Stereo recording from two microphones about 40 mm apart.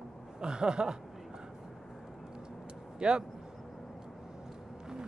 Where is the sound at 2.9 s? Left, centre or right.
Right.